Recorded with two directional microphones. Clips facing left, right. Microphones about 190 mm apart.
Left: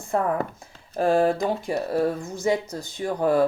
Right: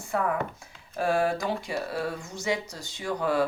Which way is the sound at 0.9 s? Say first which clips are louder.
Left 5 dB; 35° left (ahead or behind).